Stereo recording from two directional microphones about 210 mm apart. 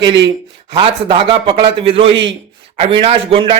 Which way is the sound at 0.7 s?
25° right (ahead or behind).